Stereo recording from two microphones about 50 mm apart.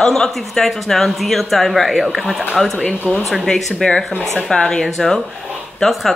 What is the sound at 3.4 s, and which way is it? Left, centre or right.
Speech, centre.